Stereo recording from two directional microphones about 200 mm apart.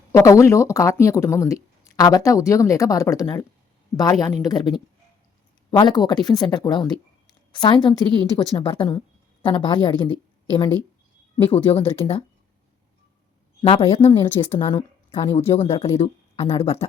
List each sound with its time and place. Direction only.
0.1 s a woman's voice: 15° left (ahead or behind)
11.4 s speech: 10° left (ahead or behind)
13.6 s a woman's voice: 30° left (ahead or behind)